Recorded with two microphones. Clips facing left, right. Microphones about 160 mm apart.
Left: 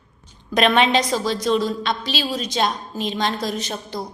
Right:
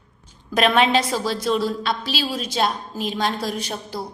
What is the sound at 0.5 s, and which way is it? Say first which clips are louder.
A woman's voice: left 1 dB; 5° right (ahead or behind).